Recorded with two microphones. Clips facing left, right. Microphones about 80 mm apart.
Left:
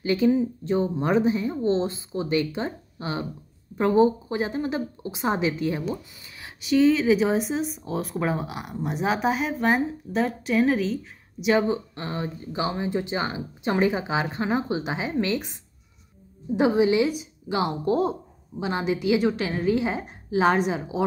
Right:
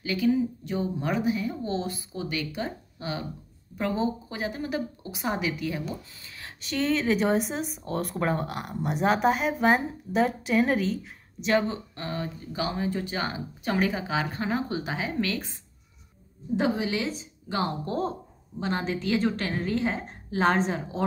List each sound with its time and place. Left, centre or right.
0.0 s speech: left
6.4 s speech: centre
11.4 s a woman's voice: centre